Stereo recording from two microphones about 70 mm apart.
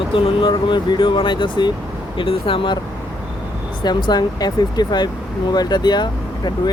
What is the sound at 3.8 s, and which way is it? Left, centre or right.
Speech, left.